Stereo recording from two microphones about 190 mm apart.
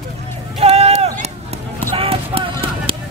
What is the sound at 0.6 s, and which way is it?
Run, 30° right (ahead or behind).